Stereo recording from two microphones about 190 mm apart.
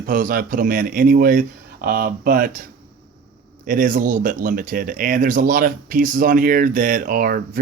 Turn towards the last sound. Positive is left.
turn(degrees=-50)  # may be behind; listen again after turning